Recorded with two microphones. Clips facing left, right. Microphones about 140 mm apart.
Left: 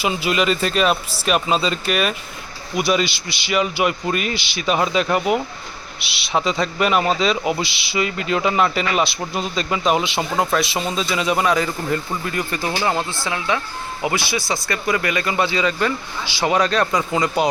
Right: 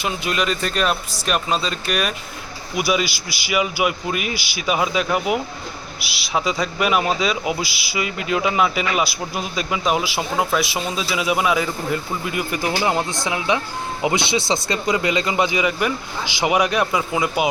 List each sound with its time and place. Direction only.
0.0 s a man's voice: 5° left (ahead or behind)